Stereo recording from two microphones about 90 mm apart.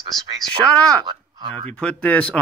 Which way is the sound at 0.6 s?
15° left (ahead or behind).